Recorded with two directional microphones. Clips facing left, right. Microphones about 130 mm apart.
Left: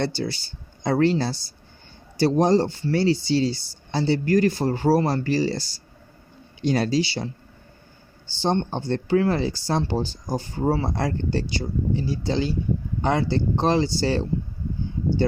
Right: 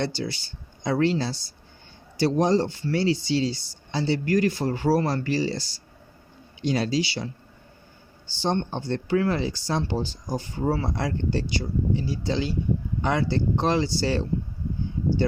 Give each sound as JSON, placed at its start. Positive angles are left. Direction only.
{"t": 0.0, "sound": "speech", "side_deg": 35}
{"t": 7.0, "sound": "speech", "side_deg": 30}
{"t": 8.4, "sound": "speech", "side_deg": 30}